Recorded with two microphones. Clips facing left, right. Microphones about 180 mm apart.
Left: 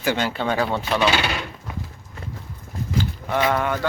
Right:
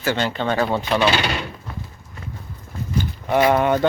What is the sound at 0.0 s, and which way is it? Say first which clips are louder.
Speech: right 1 dB; 10° left (ahead or behind).